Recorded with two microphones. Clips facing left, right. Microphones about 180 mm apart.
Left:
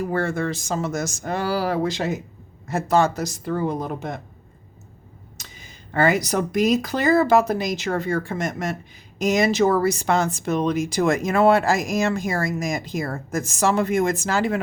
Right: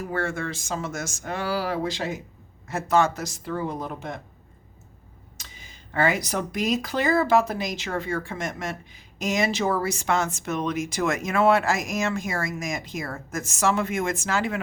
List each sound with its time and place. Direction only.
0.0 s speech: 40° left (ahead or behind)
5.4 s speech: 40° left (ahead or behind)